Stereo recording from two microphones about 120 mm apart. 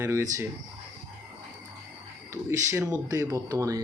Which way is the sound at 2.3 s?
25° right (ahead or behind).